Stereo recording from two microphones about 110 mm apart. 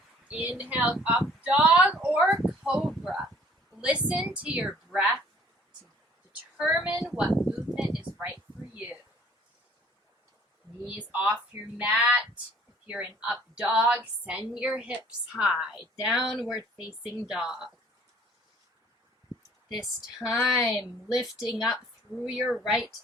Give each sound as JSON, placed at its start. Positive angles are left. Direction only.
{"t": 0.3, "sound": "a woman's voice", "side_deg": -15}
{"t": 0.9, "sound": "a sound", "side_deg": -10}
{"t": 3.8, "sound": "a woman's voice", "side_deg": -10}
{"t": 6.6, "sound": "a woman's voice", "side_deg": -10}
{"t": 8.2, "sound": "a sound", "side_deg": -15}
{"t": 10.8, "sound": "a woman's voice", "side_deg": -10}
{"t": 20.3, "sound": "speech", "side_deg": 0}